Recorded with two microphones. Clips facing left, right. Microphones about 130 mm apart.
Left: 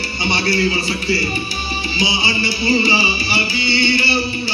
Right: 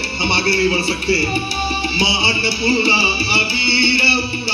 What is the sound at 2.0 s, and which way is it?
Music, 65° right (ahead or behind).